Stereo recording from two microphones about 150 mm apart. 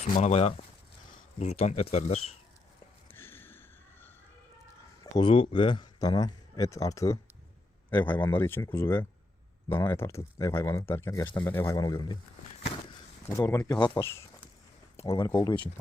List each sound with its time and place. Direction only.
0.2 s speech: 45° left (ahead or behind)
3.1 s a sound: 15° left (ahead or behind)
5.1 s a man's voice: 35° left (ahead or behind)
13.2 s speech: 20° left (ahead or behind)
14.9 s a sound: 40° left (ahead or behind)
15.4 s speech: 30° left (ahead or behind)